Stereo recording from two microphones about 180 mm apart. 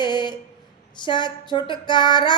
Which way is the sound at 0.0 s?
25° left (ahead or behind).